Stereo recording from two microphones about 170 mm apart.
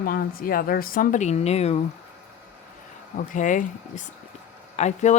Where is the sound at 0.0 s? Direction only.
60° left (ahead or behind); by 1.8 s 40° left (ahead or behind).